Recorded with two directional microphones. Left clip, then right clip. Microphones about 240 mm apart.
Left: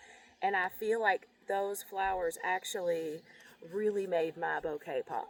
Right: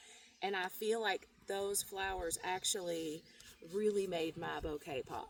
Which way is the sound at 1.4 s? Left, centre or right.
Right.